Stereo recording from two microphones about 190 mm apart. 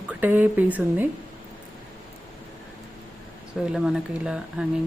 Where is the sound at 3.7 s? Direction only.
5° right (ahead or behind).